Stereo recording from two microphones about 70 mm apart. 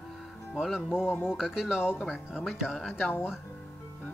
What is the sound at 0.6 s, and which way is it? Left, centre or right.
Speech, centre.